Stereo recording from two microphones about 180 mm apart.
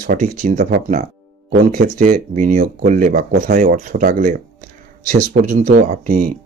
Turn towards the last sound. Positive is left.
turn(degrees=-45)  # may be behind; listen again after turning